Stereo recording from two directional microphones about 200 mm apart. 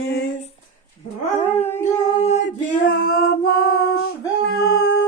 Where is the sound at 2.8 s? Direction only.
50° left (ahead or behind).